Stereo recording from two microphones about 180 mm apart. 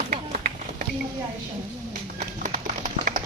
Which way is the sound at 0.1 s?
40° right (ahead or behind).